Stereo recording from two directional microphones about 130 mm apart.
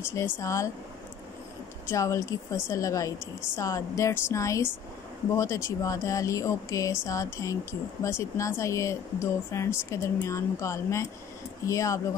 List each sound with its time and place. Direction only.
0.0 s speech: 20° left (ahead or behind)
1.9 s speech: 25° left (ahead or behind)